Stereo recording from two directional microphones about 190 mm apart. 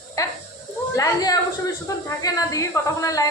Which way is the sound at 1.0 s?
20° left (ahead or behind).